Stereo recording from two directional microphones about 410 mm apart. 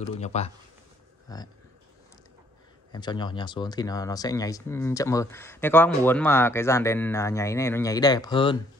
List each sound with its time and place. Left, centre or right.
0.2 s speech: centre
2.9 s speech: centre